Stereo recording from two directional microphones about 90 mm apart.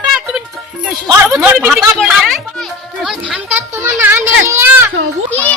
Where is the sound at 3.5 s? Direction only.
25° right (ahead or behind).